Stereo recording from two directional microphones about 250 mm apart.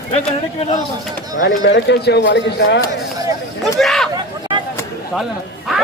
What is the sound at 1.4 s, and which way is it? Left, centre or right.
Speech, left.